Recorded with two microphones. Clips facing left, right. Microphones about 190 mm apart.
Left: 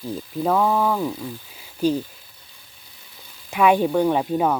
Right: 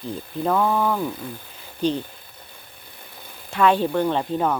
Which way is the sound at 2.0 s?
55° right (ahead or behind).